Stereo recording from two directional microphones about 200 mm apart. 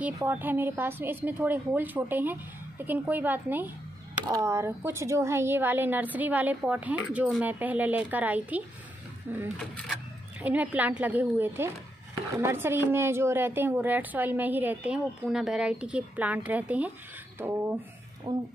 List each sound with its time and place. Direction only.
0.0 s a woman's voice: 10° right (ahead or behind)
18.3 s speech: 20° right (ahead or behind)